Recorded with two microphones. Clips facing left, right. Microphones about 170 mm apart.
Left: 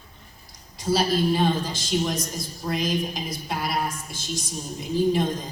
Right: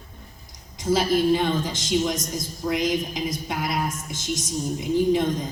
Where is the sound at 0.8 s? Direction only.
20° right (ahead or behind).